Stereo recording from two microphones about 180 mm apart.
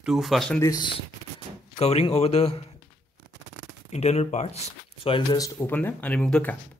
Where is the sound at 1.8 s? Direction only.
35° left (ahead or behind).